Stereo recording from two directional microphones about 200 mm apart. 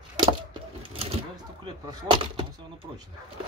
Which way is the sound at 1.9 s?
25° right (ahead or behind).